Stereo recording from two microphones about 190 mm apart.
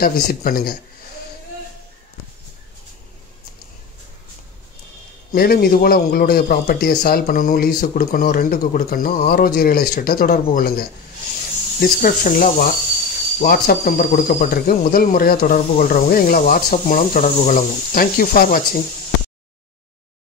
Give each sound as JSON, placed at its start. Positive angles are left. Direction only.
{"t": 0.0, "sound": "a man's voice", "side_deg": 50}
{"t": 5.3, "sound": "a man's voice", "side_deg": 50}